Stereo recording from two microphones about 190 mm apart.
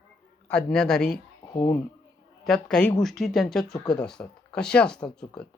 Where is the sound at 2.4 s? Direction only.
5° left (ahead or behind).